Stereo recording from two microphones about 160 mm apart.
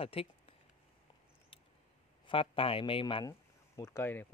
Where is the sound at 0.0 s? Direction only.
35° left (ahead or behind).